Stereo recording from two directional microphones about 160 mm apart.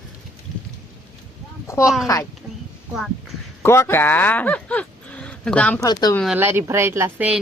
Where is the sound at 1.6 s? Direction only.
20° left (ahead or behind).